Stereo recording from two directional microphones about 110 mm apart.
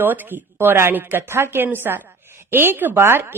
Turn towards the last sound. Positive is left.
turn(degrees=-20)  # may be behind; listen again after turning